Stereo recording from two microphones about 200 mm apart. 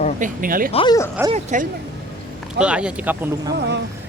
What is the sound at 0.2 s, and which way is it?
Speech, 45° right (ahead or behind).